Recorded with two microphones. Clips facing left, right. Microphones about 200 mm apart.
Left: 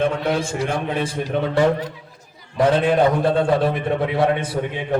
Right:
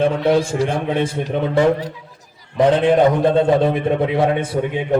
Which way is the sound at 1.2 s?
25° right (ahead or behind).